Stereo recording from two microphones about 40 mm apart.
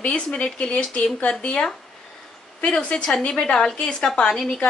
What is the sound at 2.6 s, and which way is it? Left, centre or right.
Speech, left.